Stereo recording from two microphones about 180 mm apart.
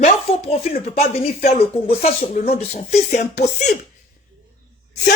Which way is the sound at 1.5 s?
35° left (ahead or behind).